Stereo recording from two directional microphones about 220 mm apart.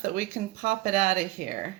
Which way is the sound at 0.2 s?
35° right (ahead or behind).